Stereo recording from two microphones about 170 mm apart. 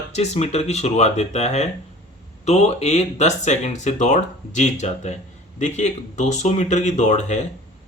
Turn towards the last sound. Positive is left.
turn(degrees=45)  # may be behind; listen again after turning